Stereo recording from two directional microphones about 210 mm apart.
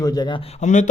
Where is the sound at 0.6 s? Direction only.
35° left (ahead or behind).